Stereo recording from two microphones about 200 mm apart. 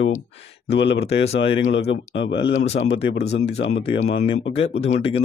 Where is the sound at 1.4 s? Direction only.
65° left (ahead or behind).